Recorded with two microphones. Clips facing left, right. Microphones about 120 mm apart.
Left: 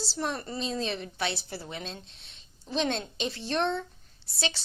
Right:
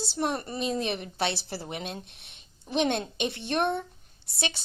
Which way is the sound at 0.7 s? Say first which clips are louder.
Right 2 dB; 20° right (ahead or behind).